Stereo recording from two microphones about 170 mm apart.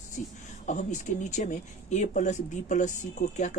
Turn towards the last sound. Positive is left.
turn(degrees=45)  # may be behind; listen again after turning